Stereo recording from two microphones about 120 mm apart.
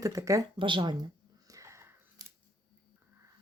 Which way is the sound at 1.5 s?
25° right (ahead or behind).